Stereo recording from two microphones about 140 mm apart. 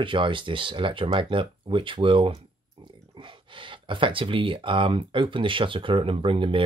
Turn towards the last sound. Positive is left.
turn(degrees=-40)  # may be behind; listen again after turning